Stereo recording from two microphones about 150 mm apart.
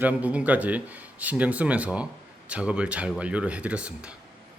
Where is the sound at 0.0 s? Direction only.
10° right (ahead or behind).